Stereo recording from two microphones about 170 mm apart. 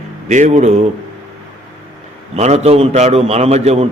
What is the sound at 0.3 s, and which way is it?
Speech, 45° right (ahead or behind).